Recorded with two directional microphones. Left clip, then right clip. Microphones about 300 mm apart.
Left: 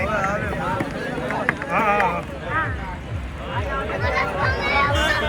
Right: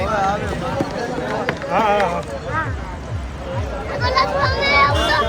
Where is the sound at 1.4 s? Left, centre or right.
Right.